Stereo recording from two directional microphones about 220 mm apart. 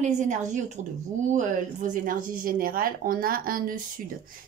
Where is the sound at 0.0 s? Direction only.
35° right (ahead or behind).